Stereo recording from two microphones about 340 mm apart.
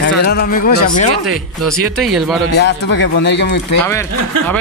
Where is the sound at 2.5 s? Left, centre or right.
Left.